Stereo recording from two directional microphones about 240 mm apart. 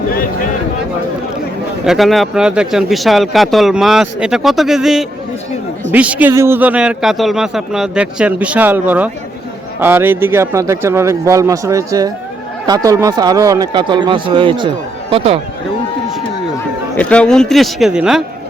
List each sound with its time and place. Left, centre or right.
1.8 s speech: centre; by 15.4 s right
17.0 s speech: centre